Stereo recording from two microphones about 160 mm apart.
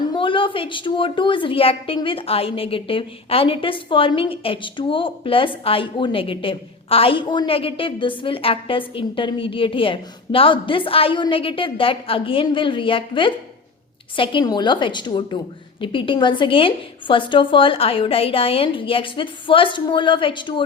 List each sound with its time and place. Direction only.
0.1 s a woman's voice: 30° left (ahead or behind)